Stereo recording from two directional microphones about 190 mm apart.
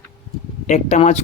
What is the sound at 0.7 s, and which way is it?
Speech, 35° left (ahead or behind).